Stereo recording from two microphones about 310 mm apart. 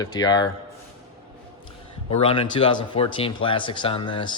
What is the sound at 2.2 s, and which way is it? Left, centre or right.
Speech, centre.